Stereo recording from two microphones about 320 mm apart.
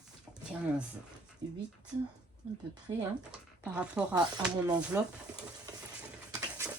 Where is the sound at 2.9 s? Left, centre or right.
Centre.